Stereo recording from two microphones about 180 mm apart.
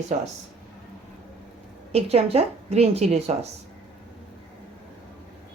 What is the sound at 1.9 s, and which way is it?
A woman's voice, 35° right (ahead or behind).